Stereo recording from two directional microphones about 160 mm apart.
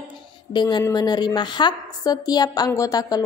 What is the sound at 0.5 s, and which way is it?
A woman's voice, 30° left (ahead or behind).